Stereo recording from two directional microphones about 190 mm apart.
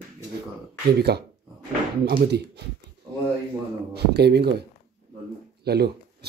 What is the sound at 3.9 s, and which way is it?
Speech, 60° right (ahead or behind).